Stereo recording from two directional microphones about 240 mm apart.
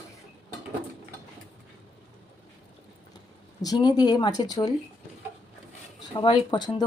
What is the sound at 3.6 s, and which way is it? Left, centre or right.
Speech, centre.